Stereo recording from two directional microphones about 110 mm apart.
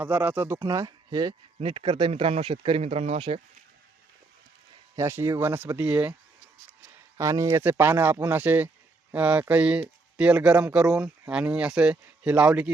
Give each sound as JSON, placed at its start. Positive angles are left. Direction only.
{"t": 0.0, "sound": "speech", "side_deg": -15}
{"t": 0.9, "sound": "speech", "side_deg": -40}
{"t": 1.6, "sound": "speech", "side_deg": -50}
{"t": 4.9, "sound": "speech", "side_deg": -25}
{"t": 7.2, "sound": "speech", "side_deg": -30}